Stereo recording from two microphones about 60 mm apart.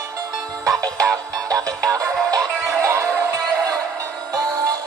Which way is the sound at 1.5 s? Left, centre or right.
Right.